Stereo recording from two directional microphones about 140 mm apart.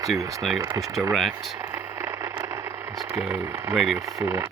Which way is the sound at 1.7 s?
20° right (ahead or behind).